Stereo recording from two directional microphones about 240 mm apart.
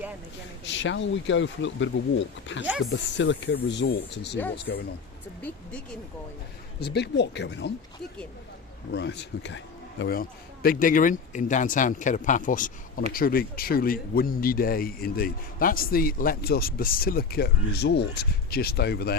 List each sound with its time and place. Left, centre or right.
0.6 s speech: left
5.4 s speech: centre
6.8 s speech: left
8.9 s speech: left